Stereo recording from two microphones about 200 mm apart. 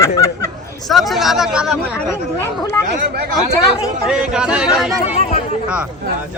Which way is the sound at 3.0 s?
55° right (ahead or behind).